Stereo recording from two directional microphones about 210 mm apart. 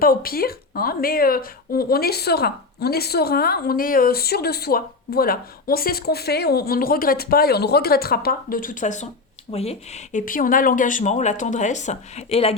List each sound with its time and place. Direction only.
0.0 s speech: 45° left (ahead or behind); by 12.5 s 30° left (ahead or behind)